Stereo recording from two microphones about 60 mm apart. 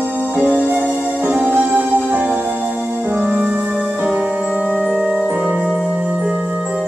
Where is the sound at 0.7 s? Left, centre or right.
Right.